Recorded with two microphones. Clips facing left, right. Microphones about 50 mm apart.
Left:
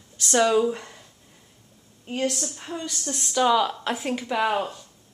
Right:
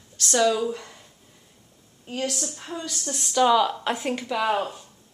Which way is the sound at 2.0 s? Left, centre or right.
Left.